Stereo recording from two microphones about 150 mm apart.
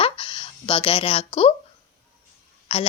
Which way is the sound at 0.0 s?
35° left (ahead or behind).